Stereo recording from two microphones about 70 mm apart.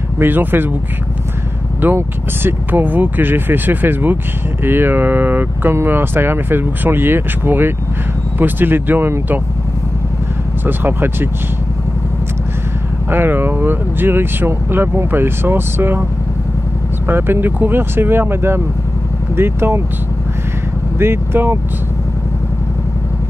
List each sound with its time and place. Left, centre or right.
0.2 s speech: right
2.0 s speech: right
10.6 s speech: right
13.1 s speech: right
17.1 s speech: right
21.0 s speech: right